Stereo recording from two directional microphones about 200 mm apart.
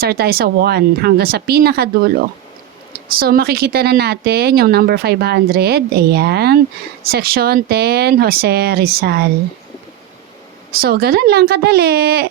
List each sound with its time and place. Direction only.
0.0 s speech: 50° right (ahead or behind)
3.1 s speech: 50° right (ahead or behind)
10.8 s speech: 50° right (ahead or behind)